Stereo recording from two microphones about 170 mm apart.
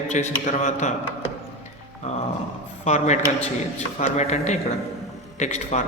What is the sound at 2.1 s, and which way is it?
Dog, 40° left (ahead or behind).